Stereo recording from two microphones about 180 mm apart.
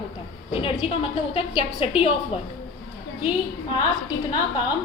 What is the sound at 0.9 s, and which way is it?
A woman's voice, 30° left (ahead or behind).